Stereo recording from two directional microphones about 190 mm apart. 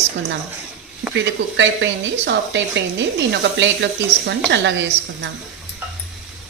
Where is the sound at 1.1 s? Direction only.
70° right (ahead or behind).